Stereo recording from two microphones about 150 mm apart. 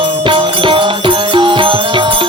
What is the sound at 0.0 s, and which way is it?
Music, 35° right (ahead or behind).